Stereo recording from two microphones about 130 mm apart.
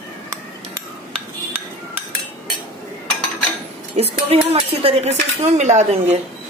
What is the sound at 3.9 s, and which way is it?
A woman's voice, 50° right (ahead or behind).